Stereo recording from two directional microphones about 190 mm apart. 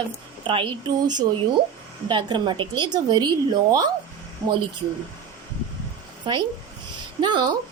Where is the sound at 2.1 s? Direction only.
25° right (ahead or behind).